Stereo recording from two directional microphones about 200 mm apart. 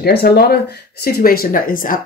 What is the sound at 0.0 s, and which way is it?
Speech, 50° left (ahead or behind).